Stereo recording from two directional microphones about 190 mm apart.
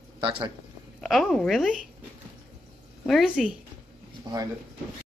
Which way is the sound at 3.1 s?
Centre (ahead or behind).